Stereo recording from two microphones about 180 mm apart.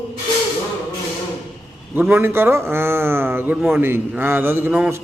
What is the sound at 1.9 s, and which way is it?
A man's voice, 10° right (ahead or behind).